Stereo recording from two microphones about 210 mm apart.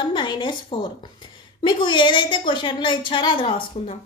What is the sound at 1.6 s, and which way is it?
A woman's voice, 20° left (ahead or behind).